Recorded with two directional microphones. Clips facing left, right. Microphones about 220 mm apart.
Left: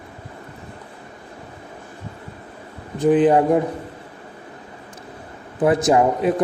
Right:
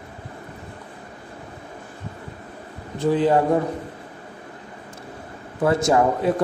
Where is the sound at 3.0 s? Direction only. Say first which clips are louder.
Left 4 dB; 15° left (ahead or behind).